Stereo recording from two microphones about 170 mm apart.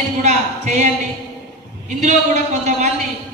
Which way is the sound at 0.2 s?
45° right (ahead or behind).